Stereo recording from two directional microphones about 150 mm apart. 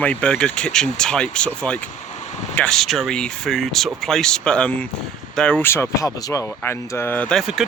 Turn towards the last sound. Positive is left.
turn(degrees=0)  # may be behind; listen again after turning